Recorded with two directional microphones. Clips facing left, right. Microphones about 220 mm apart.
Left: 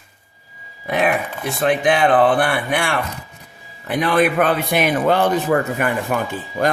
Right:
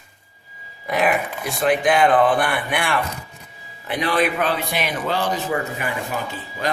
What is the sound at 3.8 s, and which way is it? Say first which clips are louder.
A man's voice: left 4 dB; 50° left (ahead or behind).